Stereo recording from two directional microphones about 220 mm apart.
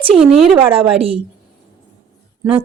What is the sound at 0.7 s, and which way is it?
Speech, 25° right (ahead or behind).